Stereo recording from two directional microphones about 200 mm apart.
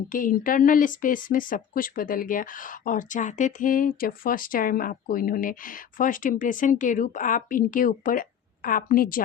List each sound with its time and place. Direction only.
0.1 s speech: 45° left (ahead or behind)